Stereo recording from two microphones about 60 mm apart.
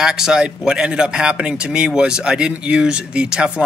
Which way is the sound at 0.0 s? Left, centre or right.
Centre.